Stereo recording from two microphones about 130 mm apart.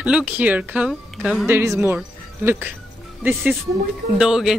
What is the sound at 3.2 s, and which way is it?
Speech, 15° right (ahead or behind).